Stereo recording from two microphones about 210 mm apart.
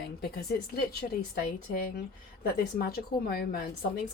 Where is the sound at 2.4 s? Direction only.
45° left (ahead or behind).